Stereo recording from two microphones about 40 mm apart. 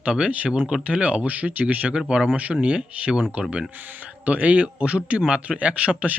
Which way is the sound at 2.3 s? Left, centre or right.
Right.